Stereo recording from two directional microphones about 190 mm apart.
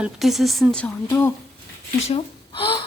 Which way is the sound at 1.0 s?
15° left (ahead or behind).